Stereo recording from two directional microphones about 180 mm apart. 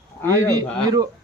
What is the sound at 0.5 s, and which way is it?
Speech, 20° right (ahead or behind).